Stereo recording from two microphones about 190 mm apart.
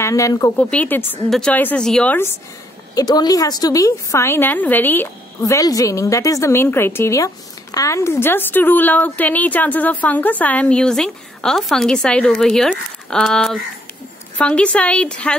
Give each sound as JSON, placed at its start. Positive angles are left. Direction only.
{"t": 0.0, "sound": "a woman's voice", "side_deg": 15}
{"t": 2.9, "sound": "a woman's voice", "side_deg": 20}